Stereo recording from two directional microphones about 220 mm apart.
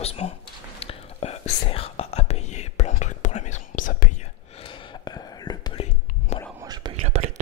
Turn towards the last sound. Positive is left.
turn(degrees=-30)  # may be behind; listen again after turning